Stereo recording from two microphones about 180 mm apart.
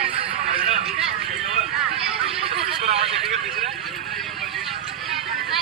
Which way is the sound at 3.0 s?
Centre (ahead or behind).